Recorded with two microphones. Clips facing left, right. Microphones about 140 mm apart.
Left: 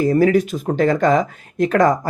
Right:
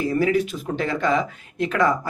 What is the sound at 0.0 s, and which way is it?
Speech, 45° left (ahead or behind).